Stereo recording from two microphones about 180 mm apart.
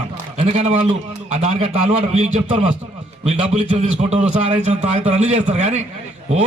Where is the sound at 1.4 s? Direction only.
35° right (ahead or behind).